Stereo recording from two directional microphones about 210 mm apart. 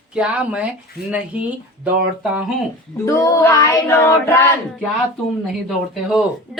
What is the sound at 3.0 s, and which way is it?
Female singing, 15° left (ahead or behind).